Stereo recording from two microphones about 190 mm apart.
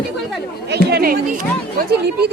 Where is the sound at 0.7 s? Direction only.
55° right (ahead or behind).